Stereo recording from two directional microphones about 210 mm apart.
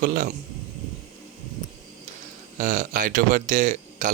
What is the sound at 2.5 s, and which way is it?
Speech, 40° right (ahead or behind).